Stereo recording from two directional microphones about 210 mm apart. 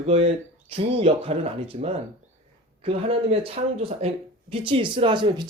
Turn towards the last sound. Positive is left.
turn(degrees=-25)  # may be behind; listen again after turning